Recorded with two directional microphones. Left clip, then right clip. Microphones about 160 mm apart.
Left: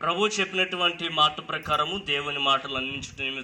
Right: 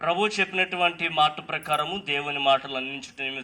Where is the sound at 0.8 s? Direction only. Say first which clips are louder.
Right 1 dB; 90° right.